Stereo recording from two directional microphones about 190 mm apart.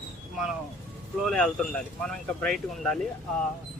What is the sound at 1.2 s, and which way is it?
Speech, 5° left (ahead or behind).